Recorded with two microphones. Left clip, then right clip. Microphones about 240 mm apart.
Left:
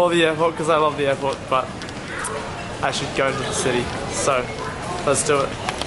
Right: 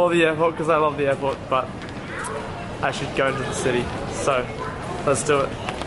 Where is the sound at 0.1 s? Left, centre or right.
Centre.